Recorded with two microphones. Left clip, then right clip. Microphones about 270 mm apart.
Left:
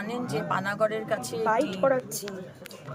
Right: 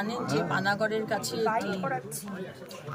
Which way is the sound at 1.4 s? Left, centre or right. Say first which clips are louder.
Left 6 dB; left.